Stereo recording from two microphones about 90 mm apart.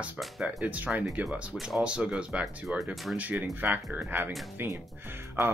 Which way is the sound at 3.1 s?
15° right (ahead or behind).